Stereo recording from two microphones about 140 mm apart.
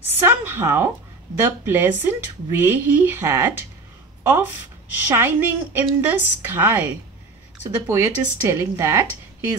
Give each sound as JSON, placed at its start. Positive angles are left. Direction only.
{"t": 0.2, "sound": "a woman's voice", "side_deg": -15}